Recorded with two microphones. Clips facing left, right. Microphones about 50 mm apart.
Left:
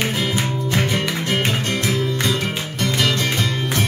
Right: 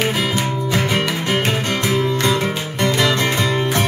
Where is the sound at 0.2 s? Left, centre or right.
Right.